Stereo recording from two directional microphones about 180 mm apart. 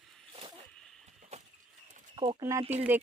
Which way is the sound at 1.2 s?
35° right (ahead or behind).